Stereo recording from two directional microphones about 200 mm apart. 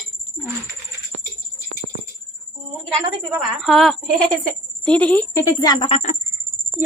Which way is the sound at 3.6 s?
Centre (ahead or behind).